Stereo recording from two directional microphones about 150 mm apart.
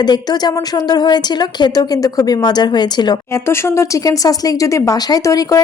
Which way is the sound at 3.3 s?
15° left (ahead or behind).